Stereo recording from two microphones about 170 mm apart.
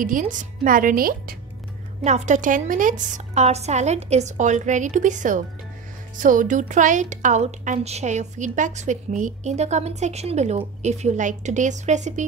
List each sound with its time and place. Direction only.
0.0 s a woman's voice: 50° right (ahead or behind)
2.0 s a woman's voice: 45° right (ahead or behind)